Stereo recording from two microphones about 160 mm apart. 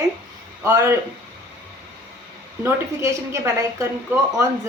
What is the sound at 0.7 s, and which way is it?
Speech, 15° right (ahead or behind).